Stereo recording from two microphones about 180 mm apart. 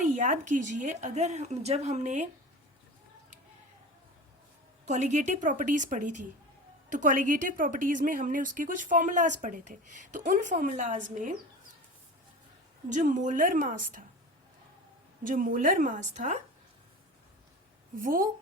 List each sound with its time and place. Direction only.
0.0 s speech: 45° right (ahead or behind)
4.9 s a woman's voice: 40° right (ahead or behind)
12.9 s a woman's voice: 45° right (ahead or behind)
15.2 s a woman's voice: 50° right (ahead or behind)
17.9 s a woman's voice: 50° right (ahead or behind)